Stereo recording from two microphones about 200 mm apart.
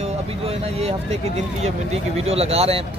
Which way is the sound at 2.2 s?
30° right (ahead or behind).